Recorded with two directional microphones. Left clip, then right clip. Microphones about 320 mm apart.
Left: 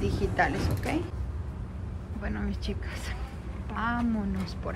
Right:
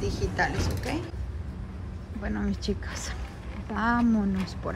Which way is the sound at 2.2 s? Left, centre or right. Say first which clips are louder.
Right 4 dB; centre.